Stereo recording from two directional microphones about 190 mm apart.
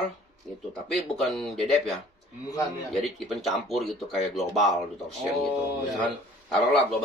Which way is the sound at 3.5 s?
Centre (ahead or behind).